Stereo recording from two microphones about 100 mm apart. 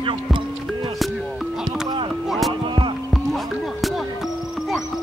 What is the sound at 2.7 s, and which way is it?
Music, 50° right (ahead or behind).